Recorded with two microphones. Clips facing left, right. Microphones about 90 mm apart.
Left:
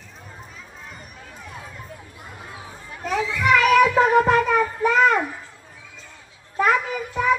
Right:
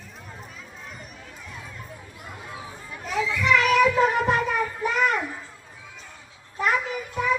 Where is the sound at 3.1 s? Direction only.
60° left (ahead or behind).